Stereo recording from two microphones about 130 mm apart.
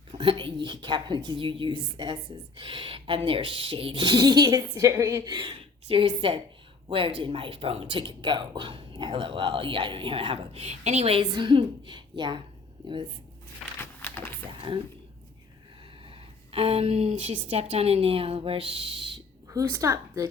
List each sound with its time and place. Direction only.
0.1 s speech: 40° right (ahead or behind)
5.9 s speech: 45° right (ahead or behind)
11.2 s speech: 35° right (ahead or behind)
13.7 s a sound: 15° left (ahead or behind)
16.0 s speech: 45° right (ahead or behind)
19.5 s speech: 25° right (ahead or behind)